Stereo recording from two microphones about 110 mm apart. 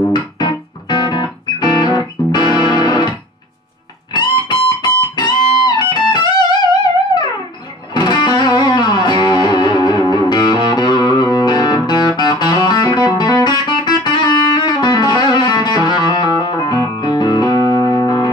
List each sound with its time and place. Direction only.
0.1 s music: 40° left (ahead or behind)
7.9 s music: 40° left (ahead or behind)